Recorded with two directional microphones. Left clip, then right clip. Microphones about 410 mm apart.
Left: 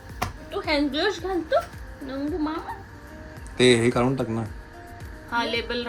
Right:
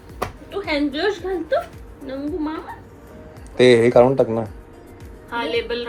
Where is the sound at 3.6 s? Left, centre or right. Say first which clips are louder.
Right 7 dB; centre.